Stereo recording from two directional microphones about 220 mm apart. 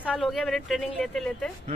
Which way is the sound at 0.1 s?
Centre (ahead or behind).